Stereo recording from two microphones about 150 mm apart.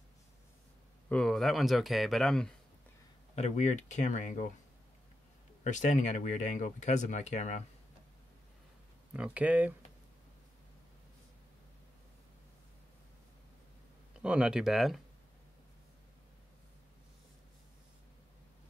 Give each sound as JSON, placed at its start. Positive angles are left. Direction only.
{"t": 1.0, "sound": "speech", "side_deg": 5}
{"t": 3.3, "sound": "speech", "side_deg": 50}
{"t": 5.6, "sound": "speech", "side_deg": 55}
{"t": 9.1, "sound": "speech", "side_deg": -10}
{"t": 14.2, "sound": "speech", "side_deg": -5}